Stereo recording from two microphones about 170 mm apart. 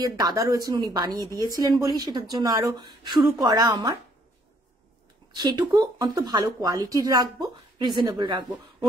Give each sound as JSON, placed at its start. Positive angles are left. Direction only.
{"t": 0.0, "sound": "speech", "side_deg": -20}
{"t": 5.3, "sound": "speech", "side_deg": -25}